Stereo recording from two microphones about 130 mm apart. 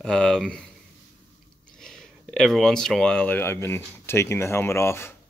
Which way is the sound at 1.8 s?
5° left (ahead or behind).